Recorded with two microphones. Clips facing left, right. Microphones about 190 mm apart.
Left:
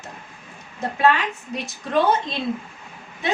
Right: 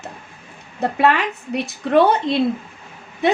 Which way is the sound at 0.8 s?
65° right (ahead or behind).